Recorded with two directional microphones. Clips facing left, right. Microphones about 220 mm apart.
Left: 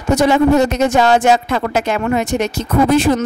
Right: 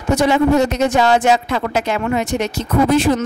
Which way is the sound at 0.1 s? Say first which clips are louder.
Left 2 dB; 45° left (ahead or behind).